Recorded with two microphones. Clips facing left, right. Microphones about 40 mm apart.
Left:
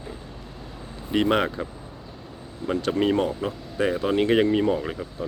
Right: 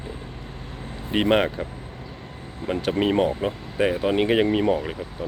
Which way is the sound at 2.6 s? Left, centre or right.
Right.